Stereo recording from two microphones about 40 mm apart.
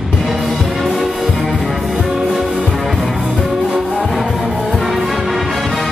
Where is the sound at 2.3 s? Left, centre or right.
Centre.